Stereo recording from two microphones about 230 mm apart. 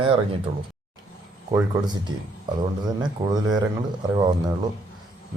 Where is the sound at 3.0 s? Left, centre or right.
Centre.